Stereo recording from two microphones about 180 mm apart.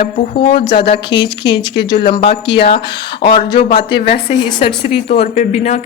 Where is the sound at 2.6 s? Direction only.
60° left (ahead or behind).